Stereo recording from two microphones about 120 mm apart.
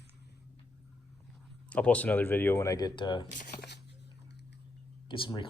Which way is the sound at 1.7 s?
10° left (ahead or behind).